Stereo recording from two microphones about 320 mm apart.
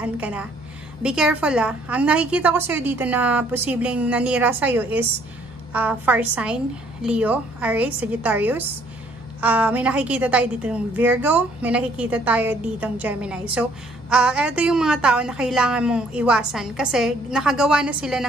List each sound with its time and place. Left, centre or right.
0.0 s a woman's voice: centre